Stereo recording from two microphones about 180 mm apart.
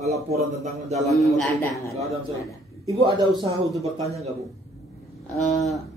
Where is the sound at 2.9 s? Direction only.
20° right (ahead or behind).